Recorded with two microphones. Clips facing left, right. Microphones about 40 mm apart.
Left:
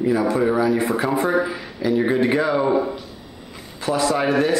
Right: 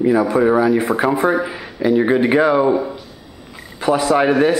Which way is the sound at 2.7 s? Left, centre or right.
Centre.